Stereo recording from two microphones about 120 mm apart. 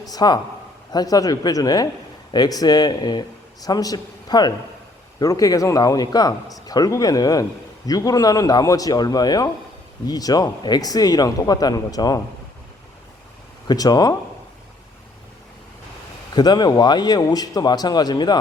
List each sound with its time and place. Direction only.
0.0 s a man's voice: 35° left (ahead or behind)
13.7 s a man's voice: 30° left (ahead or behind)
16.3 s a man's voice: 35° left (ahead or behind)